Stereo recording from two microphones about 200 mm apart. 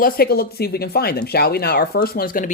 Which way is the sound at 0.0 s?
50° left (ahead or behind).